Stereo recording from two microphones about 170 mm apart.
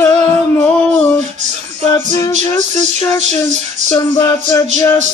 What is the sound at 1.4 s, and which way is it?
Music, 40° right (ahead or behind).